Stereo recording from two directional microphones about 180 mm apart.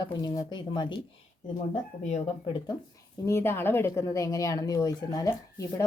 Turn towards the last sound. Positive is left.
turn(degrees=20)  # may be behind; listen again after turning